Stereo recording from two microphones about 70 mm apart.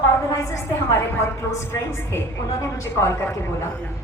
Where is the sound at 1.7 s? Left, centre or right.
Left.